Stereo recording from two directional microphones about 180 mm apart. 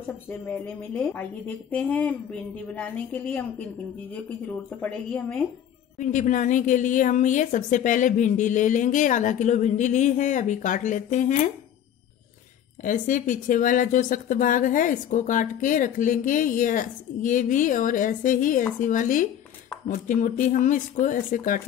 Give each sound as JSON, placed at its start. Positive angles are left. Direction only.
{"t": 0.3, "sound": "a woman's voice", "side_deg": 10}
{"t": 5.9, "sound": "speech", "side_deg": 45}
{"t": 12.8, "sound": "speech", "side_deg": 45}